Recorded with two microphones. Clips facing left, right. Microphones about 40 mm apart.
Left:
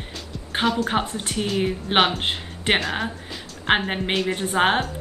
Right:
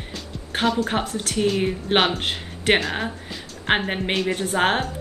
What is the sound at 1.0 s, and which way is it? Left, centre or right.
Speech, left.